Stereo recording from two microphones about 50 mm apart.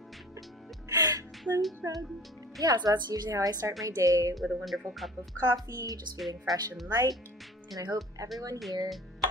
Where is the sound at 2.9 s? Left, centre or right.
Right.